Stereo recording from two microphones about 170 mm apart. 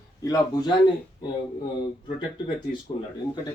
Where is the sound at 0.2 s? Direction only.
20° left (ahead or behind).